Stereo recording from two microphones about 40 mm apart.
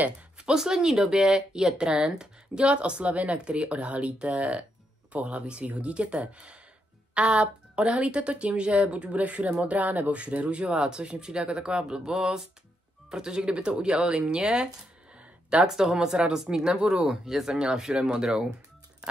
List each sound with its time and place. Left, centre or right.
0.4 s speech: centre; by 10.2 s right
10.2 s speech: right
17.3 s speech: centre